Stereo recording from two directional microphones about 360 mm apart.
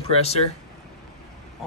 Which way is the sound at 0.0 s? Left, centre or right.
Centre.